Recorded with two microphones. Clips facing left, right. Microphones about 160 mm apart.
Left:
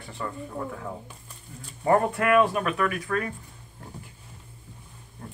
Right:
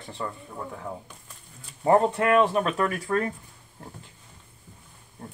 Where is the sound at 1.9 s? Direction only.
20° right (ahead or behind).